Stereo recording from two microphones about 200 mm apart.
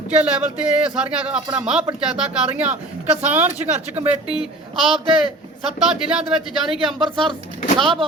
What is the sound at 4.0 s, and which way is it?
Speech, 10° right (ahead or behind).